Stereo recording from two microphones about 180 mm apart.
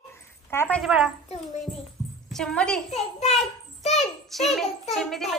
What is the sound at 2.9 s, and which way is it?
Speech, 35° left (ahead or behind).